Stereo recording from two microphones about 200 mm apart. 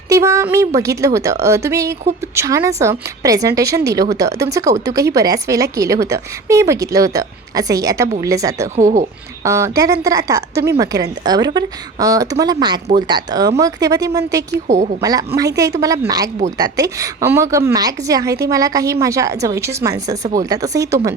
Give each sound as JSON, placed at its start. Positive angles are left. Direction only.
{"t": 0.1, "sound": "speech", "side_deg": -15}
{"t": 8.7, "sound": "speech", "side_deg": -40}
{"t": 9.4, "sound": "speech", "side_deg": -15}
{"t": 14.7, "sound": "speech", "side_deg": -35}
{"t": 15.0, "sound": "speech", "side_deg": -15}